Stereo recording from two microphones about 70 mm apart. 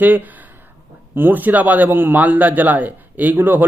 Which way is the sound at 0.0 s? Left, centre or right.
Right.